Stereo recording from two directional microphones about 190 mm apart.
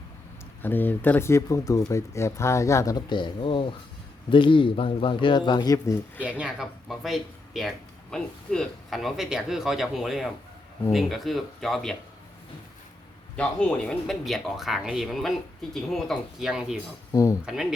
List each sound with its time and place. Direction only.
0.6 s speech: 10° left (ahead or behind)
6.2 s speech: 5° right (ahead or behind)
13.3 s speech: 5° left (ahead or behind)
17.1 s speech: 20° left (ahead or behind)
17.4 s speech: centre (ahead or behind)